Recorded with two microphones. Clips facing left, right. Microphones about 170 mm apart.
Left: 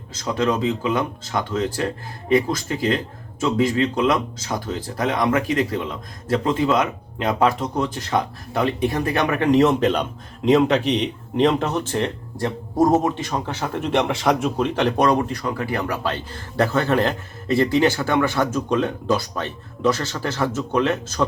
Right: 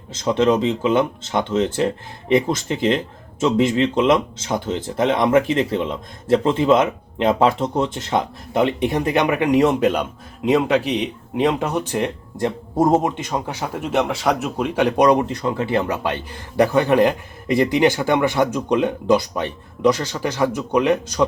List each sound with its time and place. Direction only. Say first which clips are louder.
0.1 s speech: right 5 dB; 25° right (ahead or behind)